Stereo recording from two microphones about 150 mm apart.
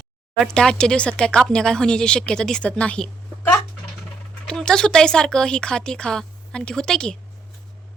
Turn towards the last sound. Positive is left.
turn(degrees=5)  # may be behind; listen again after turning